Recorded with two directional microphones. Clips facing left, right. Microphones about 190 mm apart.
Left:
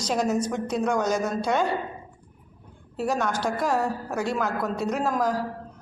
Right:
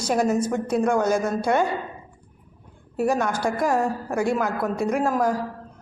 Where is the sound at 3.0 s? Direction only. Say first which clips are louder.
Right 3 dB; 10° right (ahead or behind).